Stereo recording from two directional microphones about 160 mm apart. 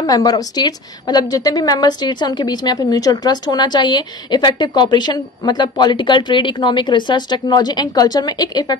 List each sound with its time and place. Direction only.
0.0 s a woman's voice: 25° left (ahead or behind)